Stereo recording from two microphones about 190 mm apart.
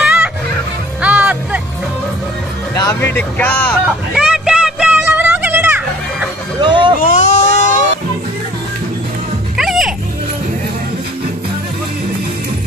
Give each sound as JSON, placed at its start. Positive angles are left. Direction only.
{"t": 0.0, "sound": "fowl", "side_deg": -5}
{"t": 1.0, "sound": "music", "side_deg": -5}
{"t": 2.7, "sound": "music", "side_deg": 20}
{"t": 3.1, "sound": "speech", "side_deg": 10}
{"t": 4.1, "sound": "a sound", "side_deg": -5}
{"t": 6.6, "sound": "a sound", "side_deg": -25}
{"t": 7.0, "sound": "baby cry", "side_deg": 45}
{"t": 9.6, "sound": "music", "side_deg": 0}